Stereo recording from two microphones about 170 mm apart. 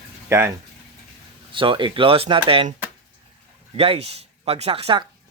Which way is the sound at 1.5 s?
30° right (ahead or behind).